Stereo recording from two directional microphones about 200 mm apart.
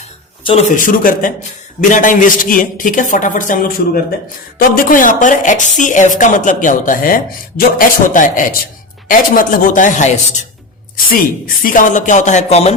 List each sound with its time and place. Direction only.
0.8 s a man's voice: 45° left (ahead or behind)